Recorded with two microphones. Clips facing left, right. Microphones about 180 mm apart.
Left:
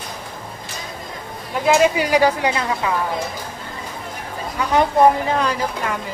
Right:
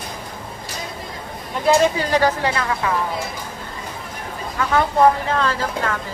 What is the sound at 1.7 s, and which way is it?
Speech, 10° left (ahead or behind).